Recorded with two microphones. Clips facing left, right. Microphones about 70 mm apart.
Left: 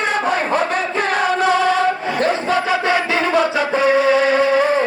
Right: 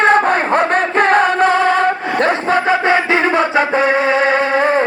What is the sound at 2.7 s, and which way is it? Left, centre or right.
Chant, right.